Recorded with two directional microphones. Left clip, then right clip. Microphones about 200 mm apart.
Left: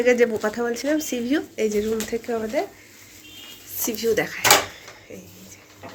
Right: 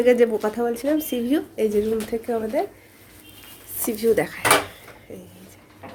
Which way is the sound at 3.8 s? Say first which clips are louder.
Right 2 dB; 15° right (ahead or behind).